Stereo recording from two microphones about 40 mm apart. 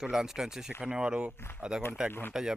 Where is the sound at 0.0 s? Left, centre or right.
Centre.